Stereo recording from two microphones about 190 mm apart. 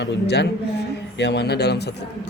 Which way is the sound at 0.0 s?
60° left (ahead or behind).